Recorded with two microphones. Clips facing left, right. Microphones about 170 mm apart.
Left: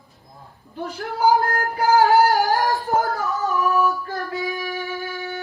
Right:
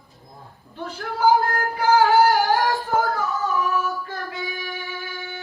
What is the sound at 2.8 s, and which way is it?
Female singing, 40° left (ahead or behind).